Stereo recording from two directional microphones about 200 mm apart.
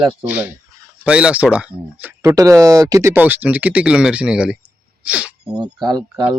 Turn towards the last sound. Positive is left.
turn(degrees=-20)  # may be behind; listen again after turning